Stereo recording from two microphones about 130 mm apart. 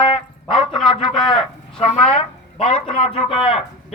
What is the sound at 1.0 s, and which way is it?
Speech, 5° left (ahead or behind).